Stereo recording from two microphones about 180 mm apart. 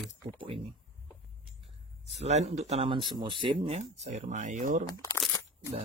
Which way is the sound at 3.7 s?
40° right (ahead or behind).